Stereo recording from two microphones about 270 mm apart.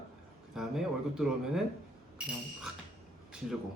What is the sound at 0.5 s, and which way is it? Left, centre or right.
Speech, centre.